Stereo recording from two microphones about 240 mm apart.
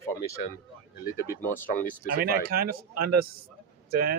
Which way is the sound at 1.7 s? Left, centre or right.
Left.